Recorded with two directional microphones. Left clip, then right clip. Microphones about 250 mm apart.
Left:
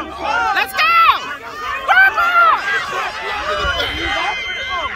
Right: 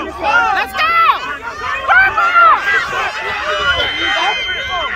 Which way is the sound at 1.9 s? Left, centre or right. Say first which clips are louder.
Right 1 dB; left.